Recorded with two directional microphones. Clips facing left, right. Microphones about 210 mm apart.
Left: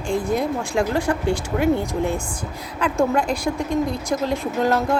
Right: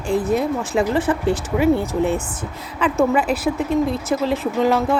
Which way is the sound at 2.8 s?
5° right (ahead or behind).